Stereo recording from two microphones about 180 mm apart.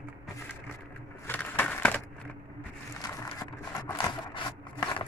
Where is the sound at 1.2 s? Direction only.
10° left (ahead or behind).